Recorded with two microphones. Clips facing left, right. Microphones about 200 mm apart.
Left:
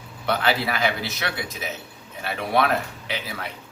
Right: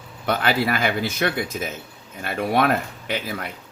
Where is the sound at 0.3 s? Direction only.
50° right (ahead or behind).